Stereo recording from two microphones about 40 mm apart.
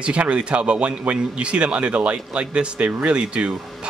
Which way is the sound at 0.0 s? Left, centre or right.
Right.